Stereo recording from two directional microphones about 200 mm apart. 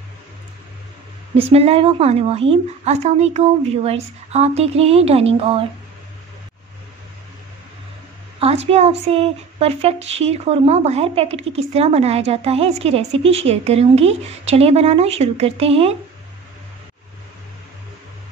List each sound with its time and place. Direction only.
1.5 s speech: 30° right (ahead or behind)
8.4 s speech: 30° right (ahead or behind)